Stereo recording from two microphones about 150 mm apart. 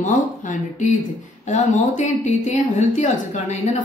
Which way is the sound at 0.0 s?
55° left (ahead or behind).